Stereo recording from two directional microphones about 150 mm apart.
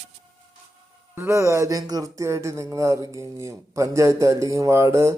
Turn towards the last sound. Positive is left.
turn(degrees=-20)  # may be behind; listen again after turning